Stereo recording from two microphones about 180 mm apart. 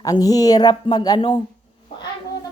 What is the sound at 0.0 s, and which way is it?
Speech, 20° left (ahead or behind).